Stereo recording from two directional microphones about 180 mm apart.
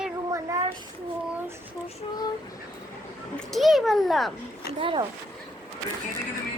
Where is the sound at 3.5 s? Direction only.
Centre (ahead or behind).